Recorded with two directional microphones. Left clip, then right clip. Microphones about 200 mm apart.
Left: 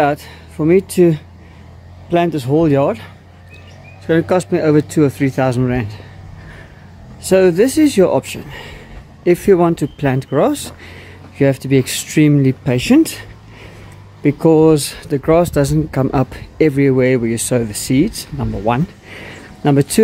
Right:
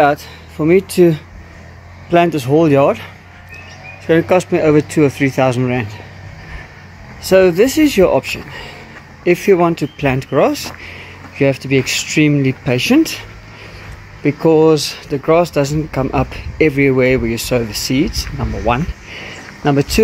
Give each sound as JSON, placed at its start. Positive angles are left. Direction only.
{"t": 0.0, "sound": "speech", "side_deg": 10}
{"t": 4.1, "sound": "speech", "side_deg": 5}
{"t": 7.2, "sound": "speech", "side_deg": 15}
{"t": 18.4, "sound": "a sound", "side_deg": 20}